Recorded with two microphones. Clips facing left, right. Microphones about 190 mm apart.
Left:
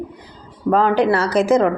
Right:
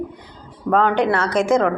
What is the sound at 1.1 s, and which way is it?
Speech, 35° left (ahead or behind).